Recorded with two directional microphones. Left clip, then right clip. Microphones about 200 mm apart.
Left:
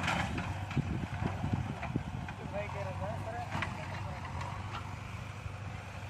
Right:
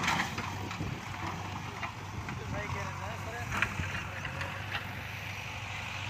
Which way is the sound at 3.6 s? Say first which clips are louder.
Right 10 dB; 65° left (ahead or behind).